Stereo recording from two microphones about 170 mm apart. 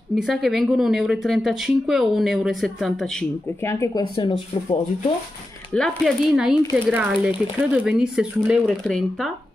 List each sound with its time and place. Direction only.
0.1 s speech: centre (ahead or behind)
3.6 s speech: 15° left (ahead or behind)
4.2 s speech: 25° left (ahead or behind)
5.7 s speech: centre (ahead or behind)